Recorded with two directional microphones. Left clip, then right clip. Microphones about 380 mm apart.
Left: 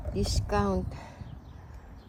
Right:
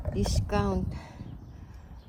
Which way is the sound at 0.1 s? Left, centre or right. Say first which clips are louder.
Left 1 dB; centre.